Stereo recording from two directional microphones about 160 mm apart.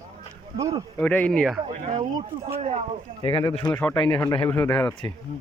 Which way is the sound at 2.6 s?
40° right (ahead or behind).